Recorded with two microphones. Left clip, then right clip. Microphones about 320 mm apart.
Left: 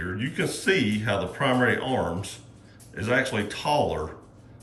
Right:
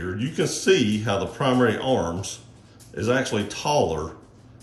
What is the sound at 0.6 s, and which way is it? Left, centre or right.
Speech, centre.